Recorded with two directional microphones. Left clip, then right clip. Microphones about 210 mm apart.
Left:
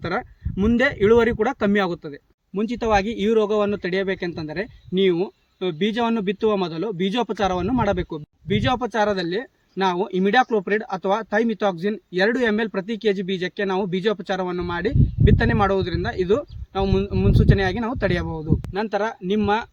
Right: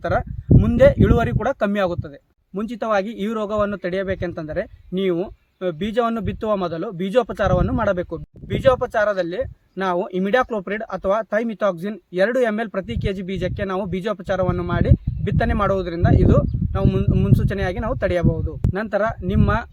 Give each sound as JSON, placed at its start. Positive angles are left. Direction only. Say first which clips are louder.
{"t": 0.0, "sound": "speech", "louder": "right 4 dB", "side_deg": -30}